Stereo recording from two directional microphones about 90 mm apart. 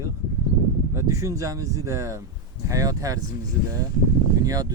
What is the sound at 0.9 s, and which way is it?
Speech, 35° right (ahead or behind).